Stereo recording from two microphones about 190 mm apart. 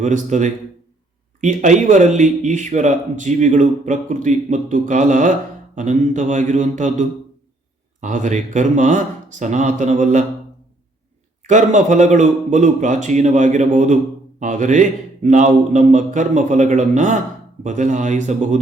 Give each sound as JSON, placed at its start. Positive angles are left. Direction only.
{"t": 0.0, "sound": "a man's voice", "side_deg": -40}
{"t": 11.4, "sound": "a man's voice", "side_deg": -40}